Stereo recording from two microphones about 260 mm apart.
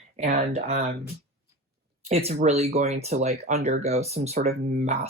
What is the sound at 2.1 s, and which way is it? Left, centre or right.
Speech, right.